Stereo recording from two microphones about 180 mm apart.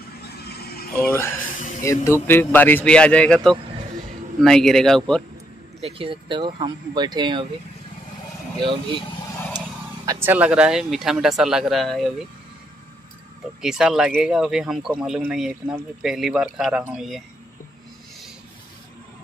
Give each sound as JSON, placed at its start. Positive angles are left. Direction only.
{"t": 0.4, "sound": "a sound", "side_deg": 60}
{"t": 1.8, "sound": "a man's voice", "side_deg": 15}
{"t": 5.8, "sound": "speech", "side_deg": -30}
{"t": 8.5, "sound": "speech", "side_deg": -25}
{"t": 10.2, "sound": "speech", "side_deg": -10}
{"t": 13.6, "sound": "speech", "side_deg": -5}